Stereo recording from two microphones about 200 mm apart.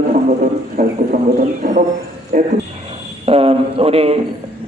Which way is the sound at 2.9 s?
30° right (ahead or behind).